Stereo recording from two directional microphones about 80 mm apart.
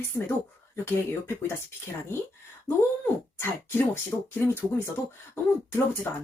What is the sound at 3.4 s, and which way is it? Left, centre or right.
Speech, left.